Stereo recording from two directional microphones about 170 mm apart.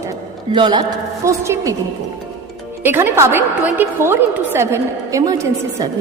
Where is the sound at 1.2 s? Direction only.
15° right (ahead or behind).